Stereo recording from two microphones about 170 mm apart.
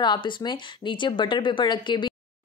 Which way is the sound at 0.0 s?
25° left (ahead or behind).